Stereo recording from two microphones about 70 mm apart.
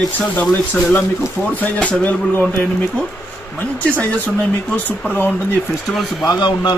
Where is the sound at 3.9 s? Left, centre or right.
Left.